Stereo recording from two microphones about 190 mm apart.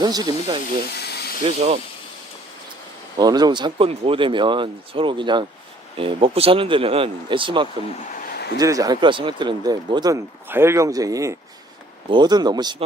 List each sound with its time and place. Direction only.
0.0 s speech: 20° right (ahead or behind)
0.9 s a sound: 60° left (ahead or behind)
1.5 s speech: 35° right (ahead or behind)
3.2 s speech: 20° right (ahead or behind)
8.1 s a sound: 55° left (ahead or behind)
8.5 s speech: 20° right (ahead or behind)